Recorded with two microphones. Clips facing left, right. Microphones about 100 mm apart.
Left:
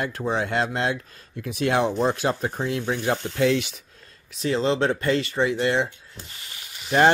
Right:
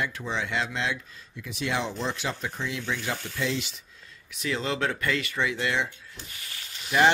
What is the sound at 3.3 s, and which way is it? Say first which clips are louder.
Speech: left 9 dB; 60° left (ahead or behind).